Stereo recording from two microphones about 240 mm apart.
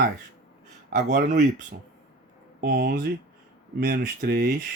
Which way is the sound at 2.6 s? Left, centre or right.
Right.